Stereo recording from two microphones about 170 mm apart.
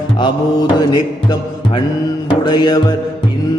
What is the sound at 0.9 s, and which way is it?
Music, 25° left (ahead or behind).